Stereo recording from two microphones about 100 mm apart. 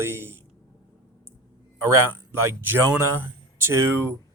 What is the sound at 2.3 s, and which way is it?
Speech, 25° right (ahead or behind).